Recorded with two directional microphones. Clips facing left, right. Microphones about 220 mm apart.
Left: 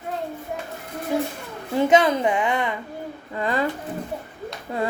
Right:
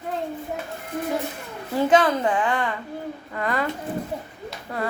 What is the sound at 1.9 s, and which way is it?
Speech, 20° left (ahead or behind).